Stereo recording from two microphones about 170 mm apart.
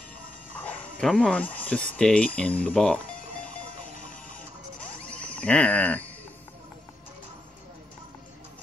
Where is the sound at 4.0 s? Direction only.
50° left (ahead or behind).